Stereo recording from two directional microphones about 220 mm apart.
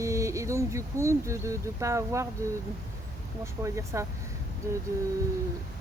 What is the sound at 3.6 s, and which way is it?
Speech, 15° right (ahead or behind).